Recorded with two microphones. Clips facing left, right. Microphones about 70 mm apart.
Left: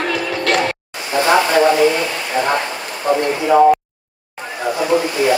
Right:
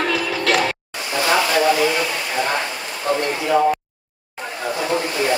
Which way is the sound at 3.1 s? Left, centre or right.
Left.